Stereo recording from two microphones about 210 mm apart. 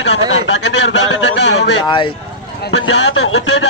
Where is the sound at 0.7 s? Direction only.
60° left (ahead or behind).